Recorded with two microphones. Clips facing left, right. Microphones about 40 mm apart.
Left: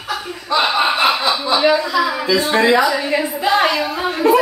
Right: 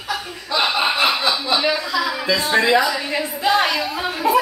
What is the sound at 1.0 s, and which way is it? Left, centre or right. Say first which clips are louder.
Chuckle: left 3 dB; left.